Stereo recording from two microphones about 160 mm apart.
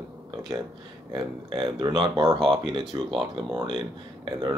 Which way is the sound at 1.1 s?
30° right (ahead or behind).